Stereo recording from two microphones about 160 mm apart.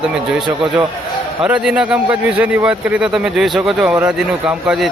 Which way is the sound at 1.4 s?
5° right (ahead or behind).